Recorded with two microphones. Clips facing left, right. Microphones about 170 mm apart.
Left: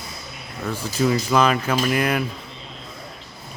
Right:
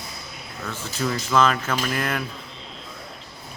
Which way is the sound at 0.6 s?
15° left (ahead or behind).